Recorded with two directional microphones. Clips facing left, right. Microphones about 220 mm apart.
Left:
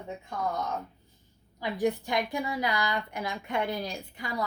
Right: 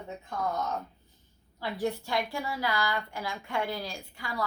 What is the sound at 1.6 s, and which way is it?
A woman's voice, 15° left (ahead or behind).